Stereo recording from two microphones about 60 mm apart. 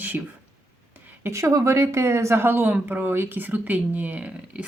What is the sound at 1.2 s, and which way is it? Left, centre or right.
Speech, right.